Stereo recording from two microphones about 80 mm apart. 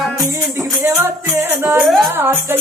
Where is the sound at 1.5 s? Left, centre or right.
Right.